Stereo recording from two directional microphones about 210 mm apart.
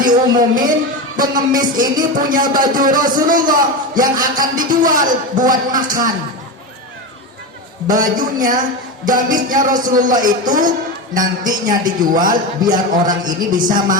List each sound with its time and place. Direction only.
0.0 s a man's voice: 40° right (ahead or behind)
7.9 s a man's voice: 40° right (ahead or behind)